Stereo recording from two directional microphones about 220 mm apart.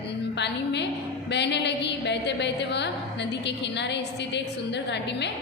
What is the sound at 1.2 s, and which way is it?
A woman's voice, 50° left (ahead or behind).